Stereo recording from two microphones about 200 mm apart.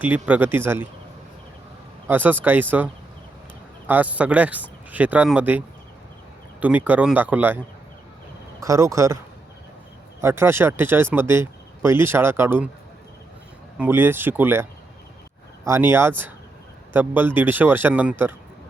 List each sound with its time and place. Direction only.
0.3 s speech: 10° right (ahead or behind)
2.0 s speech: 10° right (ahead or behind)
8.6 s speech: 15° right (ahead or behind)
10.2 s speech: 10° right (ahead or behind)
13.7 s speech: 10° right (ahead or behind)